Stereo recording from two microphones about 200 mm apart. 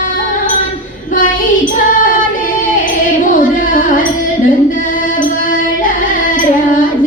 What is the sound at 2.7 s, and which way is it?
Music, 40° left (ahead or behind).